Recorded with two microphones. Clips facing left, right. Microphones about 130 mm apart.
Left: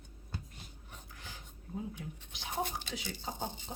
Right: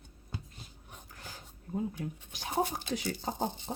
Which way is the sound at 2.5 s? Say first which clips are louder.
Right 6 dB; 45° right (ahead or behind).